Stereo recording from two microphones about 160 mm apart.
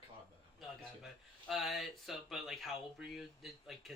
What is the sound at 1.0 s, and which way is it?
Speech, centre (ahead or behind).